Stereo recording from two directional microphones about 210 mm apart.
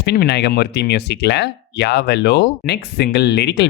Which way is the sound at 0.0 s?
50° left (ahead or behind).